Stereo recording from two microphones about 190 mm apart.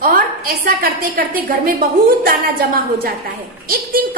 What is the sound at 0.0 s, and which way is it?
A woman's voice, 50° right (ahead or behind).